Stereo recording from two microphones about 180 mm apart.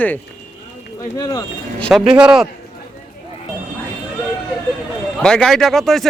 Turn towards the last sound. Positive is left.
turn(degrees=0)  # may be behind; listen again after turning